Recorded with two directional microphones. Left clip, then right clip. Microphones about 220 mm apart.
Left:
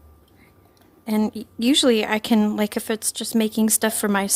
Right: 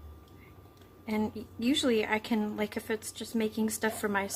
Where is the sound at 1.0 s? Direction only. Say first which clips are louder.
Left 9 dB; 45° left (ahead or behind).